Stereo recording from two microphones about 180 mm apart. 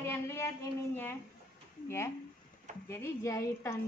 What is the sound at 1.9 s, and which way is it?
A woman's voice, 15° left (ahead or behind).